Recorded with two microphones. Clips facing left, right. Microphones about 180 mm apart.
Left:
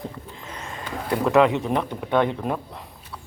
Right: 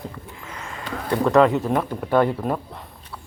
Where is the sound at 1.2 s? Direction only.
Centre (ahead or behind).